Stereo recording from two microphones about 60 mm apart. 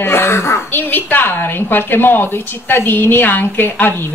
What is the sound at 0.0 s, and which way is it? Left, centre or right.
Throat clearing, left.